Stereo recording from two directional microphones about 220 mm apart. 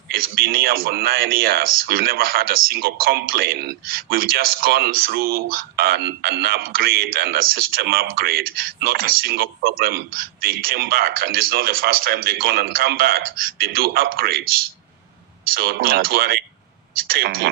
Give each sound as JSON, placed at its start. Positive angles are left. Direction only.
{"t": 0.1, "sound": "speech", "side_deg": -40}